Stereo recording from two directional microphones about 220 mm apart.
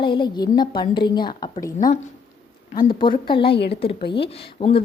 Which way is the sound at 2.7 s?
20° left (ahead or behind).